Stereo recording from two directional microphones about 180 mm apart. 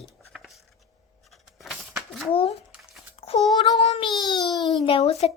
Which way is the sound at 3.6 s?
25° left (ahead or behind).